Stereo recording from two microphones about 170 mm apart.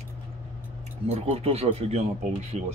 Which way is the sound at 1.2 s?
35° right (ahead or behind).